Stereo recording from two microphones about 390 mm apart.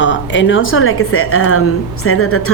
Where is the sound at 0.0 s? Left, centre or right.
Left.